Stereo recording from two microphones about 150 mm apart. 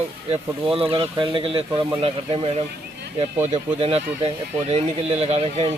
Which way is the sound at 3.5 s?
40° right (ahead or behind).